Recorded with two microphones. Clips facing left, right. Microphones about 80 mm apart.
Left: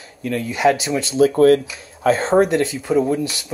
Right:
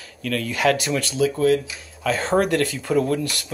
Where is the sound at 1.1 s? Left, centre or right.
Left.